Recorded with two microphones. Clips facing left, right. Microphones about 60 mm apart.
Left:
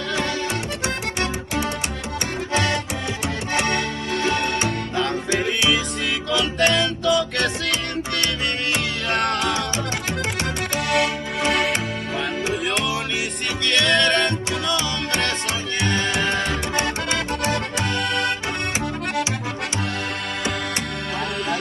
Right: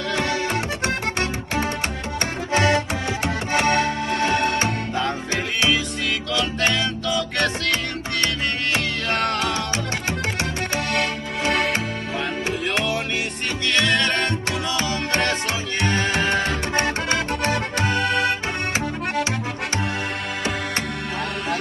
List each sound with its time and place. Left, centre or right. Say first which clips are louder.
2.5 s music: right 4 dB; right
4.1 s music: left 1 dB; centre
6.3 s music: left 4 dB; centre
9.1 s music: left 1 dB; centre
10.9 s music: left 3 dB; centre
13.7 s music: left 2 dB; centre
15.8 s music: right 1 dB; centre
17.8 s accordion: right 4 dB; centre